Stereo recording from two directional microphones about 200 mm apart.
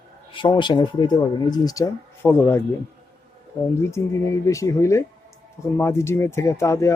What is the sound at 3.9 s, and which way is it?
Speech, 15° left (ahead or behind).